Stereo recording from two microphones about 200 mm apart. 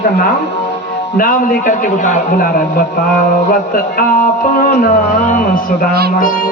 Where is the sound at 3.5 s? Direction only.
45° left (ahead or behind).